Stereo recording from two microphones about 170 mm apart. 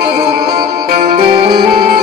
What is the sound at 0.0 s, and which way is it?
Music, 65° right (ahead or behind).